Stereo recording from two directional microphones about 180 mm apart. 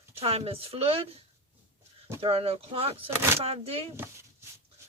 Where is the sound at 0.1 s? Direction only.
35° right (ahead or behind).